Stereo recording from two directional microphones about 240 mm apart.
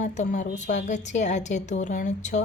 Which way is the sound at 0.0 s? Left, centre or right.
Left.